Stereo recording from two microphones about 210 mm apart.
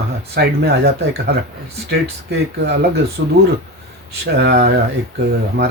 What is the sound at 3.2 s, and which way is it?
Speech, 65° right (ahead or behind).